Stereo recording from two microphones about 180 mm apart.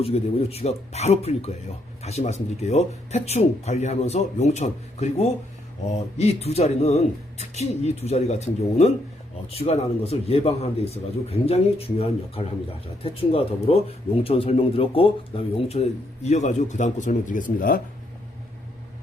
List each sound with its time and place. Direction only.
0.0 s speech: 35° left (ahead or behind); by 17.7 s 50° left (ahead or behind)